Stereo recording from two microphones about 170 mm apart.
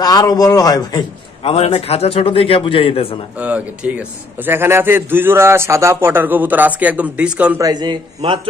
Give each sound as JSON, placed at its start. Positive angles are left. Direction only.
{"t": 0.0, "sound": "a man's voice", "side_deg": 20}
{"t": 1.4, "sound": "a man's voice", "side_deg": 35}
{"t": 3.3, "sound": "a man's voice", "side_deg": -10}
{"t": 7.6, "sound": "a man's voice", "side_deg": -25}